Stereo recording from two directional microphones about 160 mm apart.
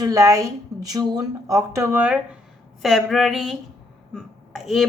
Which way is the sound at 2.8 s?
Centre (ahead or behind).